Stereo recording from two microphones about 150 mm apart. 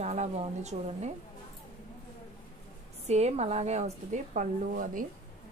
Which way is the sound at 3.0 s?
45° right (ahead or behind).